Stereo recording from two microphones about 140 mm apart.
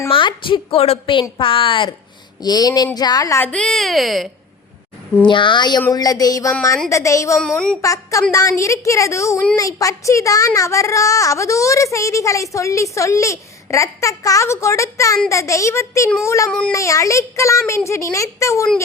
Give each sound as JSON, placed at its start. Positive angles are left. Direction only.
{"t": 0.1, "sound": "a woman's voice", "side_deg": 35}
{"t": 3.5, "sound": "speech", "side_deg": 5}
{"t": 5.2, "sound": "a woman's voice", "side_deg": 35}
{"t": 16.5, "sound": "speech", "side_deg": 5}
{"t": 16.7, "sound": "speech", "side_deg": 20}